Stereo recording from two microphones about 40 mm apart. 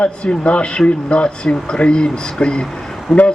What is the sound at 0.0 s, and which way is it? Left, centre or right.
Speech, left.